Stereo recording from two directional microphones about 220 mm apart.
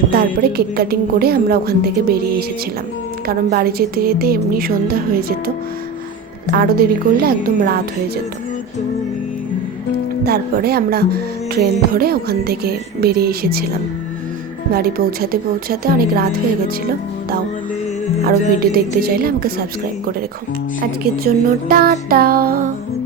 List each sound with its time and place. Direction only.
0.1 s music: 45° right (ahead or behind)
3.2 s music: 45° right (ahead or behind)
6.5 s music: 45° right (ahead or behind)
10.2 s music: 45° right (ahead or behind)
14.7 s music: 45° right (ahead or behind)
18.2 s music: 40° right (ahead or behind)
21.0 s music: 45° right (ahead or behind)